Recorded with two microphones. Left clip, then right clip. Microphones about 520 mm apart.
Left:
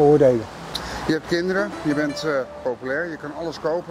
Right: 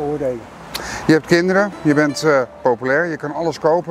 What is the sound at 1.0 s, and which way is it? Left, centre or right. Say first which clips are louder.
Speech: right 9 dB; right.